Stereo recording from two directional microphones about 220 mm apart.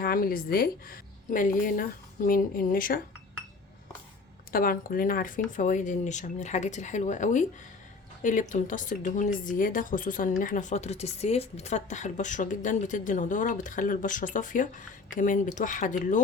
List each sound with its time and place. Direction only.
0.0 s a woman's voice: 40° left (ahead or behind)
4.5 s a woman's voice: 40° left (ahead or behind)